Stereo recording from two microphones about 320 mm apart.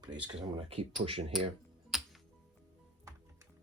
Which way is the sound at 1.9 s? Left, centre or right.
Centre.